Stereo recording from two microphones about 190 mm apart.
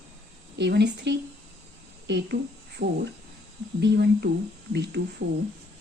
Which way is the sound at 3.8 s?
60° right (ahead or behind).